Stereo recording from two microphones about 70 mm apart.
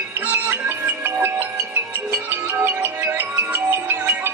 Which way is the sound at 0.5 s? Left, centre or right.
Right.